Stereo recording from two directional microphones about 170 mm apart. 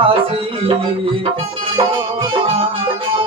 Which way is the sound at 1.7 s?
30° right (ahead or behind).